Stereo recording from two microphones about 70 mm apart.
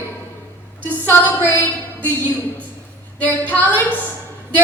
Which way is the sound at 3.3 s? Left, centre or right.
Left.